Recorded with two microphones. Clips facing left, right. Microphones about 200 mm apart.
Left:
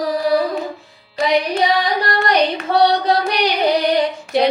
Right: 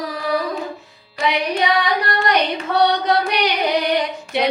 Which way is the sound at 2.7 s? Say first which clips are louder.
Left 1 dB; 30° left (ahead or behind).